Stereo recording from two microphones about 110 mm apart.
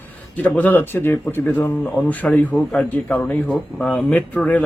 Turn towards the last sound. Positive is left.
turn(degrees=15)  # may be behind; listen again after turning